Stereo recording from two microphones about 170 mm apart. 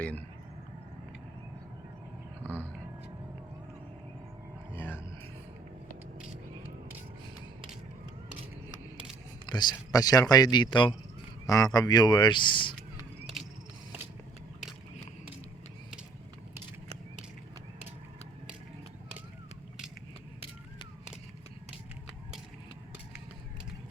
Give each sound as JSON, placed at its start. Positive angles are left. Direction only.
{"t": 4.7, "sound": "music", "side_deg": 10}
{"t": 9.5, "sound": "speech", "side_deg": 25}
{"t": 13.4, "sound": "a sound", "side_deg": 0}